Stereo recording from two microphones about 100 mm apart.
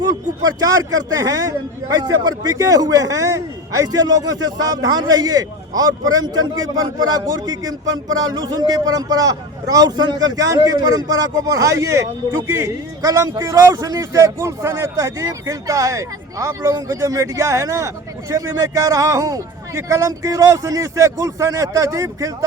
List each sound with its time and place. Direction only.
0.0 s a man's voice: 40° right (ahead or behind)